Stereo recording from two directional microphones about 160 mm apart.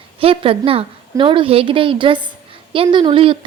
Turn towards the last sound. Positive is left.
turn(degrees=-35)  # may be behind; listen again after turning